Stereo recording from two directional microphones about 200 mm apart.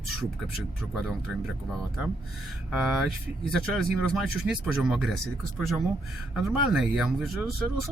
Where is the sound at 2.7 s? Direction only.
Centre (ahead or behind).